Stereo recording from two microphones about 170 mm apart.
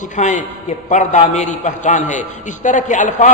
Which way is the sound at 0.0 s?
45° left (ahead or behind).